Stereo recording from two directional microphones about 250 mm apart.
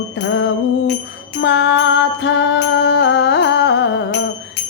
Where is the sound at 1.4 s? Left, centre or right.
Left.